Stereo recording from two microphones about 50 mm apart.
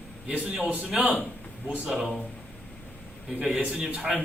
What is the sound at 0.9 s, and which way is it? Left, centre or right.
A man's voice, centre.